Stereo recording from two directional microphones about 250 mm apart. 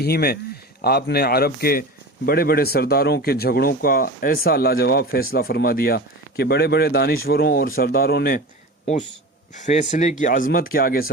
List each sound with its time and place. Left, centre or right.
0.0 s speech: left
9.9 s speech: left